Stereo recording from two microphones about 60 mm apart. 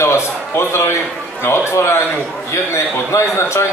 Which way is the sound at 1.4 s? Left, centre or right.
Left.